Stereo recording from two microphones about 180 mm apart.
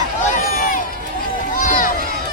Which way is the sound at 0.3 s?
50° left (ahead or behind).